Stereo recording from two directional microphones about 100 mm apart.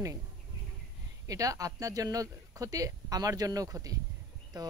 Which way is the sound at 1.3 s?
35° right (ahead or behind).